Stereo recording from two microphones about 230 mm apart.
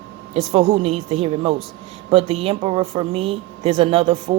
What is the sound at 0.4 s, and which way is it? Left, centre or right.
A woman's voice, right.